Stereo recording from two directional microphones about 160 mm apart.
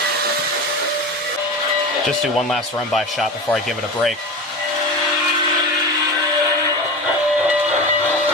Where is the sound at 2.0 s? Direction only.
Centre (ahead or behind).